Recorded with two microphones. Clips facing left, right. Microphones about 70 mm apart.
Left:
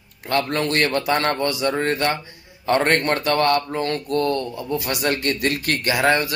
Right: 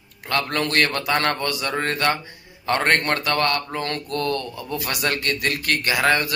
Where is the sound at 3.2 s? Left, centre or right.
Left.